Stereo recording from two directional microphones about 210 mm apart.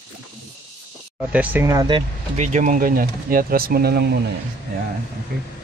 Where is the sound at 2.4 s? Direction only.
35° right (ahead or behind).